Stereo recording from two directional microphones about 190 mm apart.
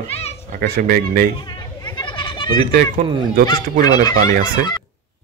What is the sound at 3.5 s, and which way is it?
Fowl, 20° left (ahead or behind).